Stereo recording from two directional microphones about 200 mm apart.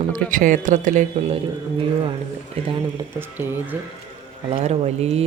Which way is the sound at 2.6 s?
30° right (ahead or behind).